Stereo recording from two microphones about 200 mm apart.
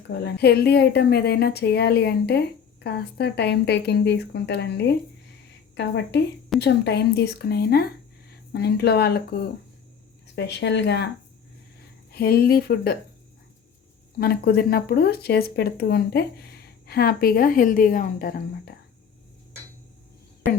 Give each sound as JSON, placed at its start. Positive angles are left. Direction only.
{"t": 0.1, "sound": "speech", "side_deg": 55}
{"t": 10.3, "sound": "speech", "side_deg": 60}
{"t": 12.1, "sound": "speech", "side_deg": 50}
{"t": 14.2, "sound": "speech", "side_deg": 50}